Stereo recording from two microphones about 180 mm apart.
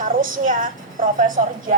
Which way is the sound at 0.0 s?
50° right (ahead or behind).